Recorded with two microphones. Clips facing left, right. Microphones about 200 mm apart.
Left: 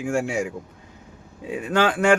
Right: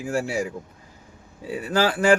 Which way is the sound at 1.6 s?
35° right (ahead or behind).